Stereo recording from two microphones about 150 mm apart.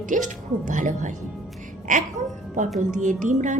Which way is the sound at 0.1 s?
55° right (ahead or behind).